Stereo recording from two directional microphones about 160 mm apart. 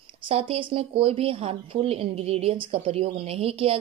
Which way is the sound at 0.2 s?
35° right (ahead or behind).